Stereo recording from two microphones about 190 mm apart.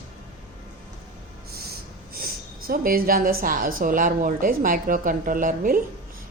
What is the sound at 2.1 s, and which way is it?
A woman's voice, 50° right (ahead or behind).